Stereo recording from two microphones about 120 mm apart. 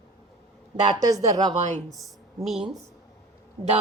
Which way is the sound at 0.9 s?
30° right (ahead or behind).